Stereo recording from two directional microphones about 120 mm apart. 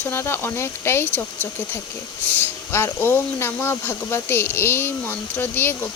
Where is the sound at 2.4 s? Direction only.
20° left (ahead or behind).